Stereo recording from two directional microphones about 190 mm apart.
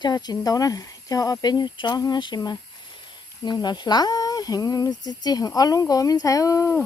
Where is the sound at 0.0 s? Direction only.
20° left (ahead or behind).